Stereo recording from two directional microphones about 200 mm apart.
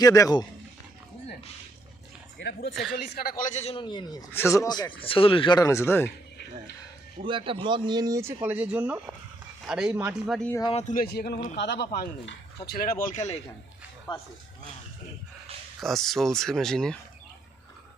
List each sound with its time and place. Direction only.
0.0 s speech: 20° left (ahead or behind)
2.4 s a man's voice: 60° left (ahead or behind); by 6.1 s 10° left (ahead or behind)
6.1 s a sound: 55° left (ahead or behind)
7.3 s speech: 25° right (ahead or behind); by 10.3 s 10° right (ahead or behind)
10.3 s speech: 5° left (ahead or behind)
10.6 s speech: 30° left (ahead or behind); by 12.4 s 65° left (ahead or behind)
12.6 s speech: 50° left (ahead or behind)
15.8 s speech: centre (ahead or behind)